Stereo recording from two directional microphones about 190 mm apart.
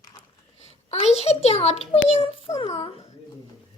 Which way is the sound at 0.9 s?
35° left (ahead or behind).